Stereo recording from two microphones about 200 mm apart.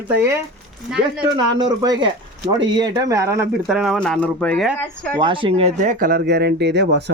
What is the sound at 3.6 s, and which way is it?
Speech, centre (ahead or behind).